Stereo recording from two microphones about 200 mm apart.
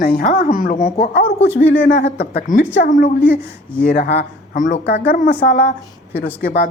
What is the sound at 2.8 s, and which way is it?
A woman's voice, 40° left (ahead or behind).